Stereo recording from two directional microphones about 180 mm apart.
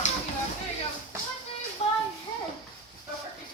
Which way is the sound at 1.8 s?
35° left (ahead or behind).